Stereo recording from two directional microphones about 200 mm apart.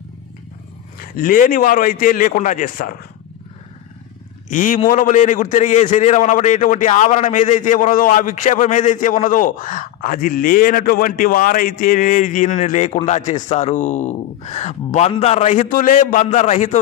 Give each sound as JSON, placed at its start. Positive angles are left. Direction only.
{"t": 1.1, "sound": "a man's voice", "side_deg": 45}
{"t": 4.5, "sound": "a man's voice", "side_deg": 40}